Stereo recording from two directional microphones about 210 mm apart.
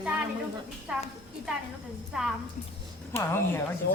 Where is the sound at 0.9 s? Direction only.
5° right (ahead or behind).